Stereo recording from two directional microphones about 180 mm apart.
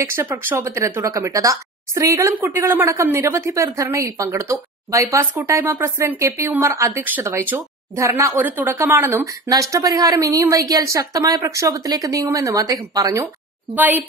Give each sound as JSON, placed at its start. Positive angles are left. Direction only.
{"t": 0.0, "sound": "speech", "side_deg": -15}